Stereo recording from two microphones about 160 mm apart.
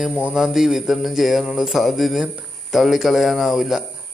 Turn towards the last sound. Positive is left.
turn(degrees=0)  # may be behind; listen again after turning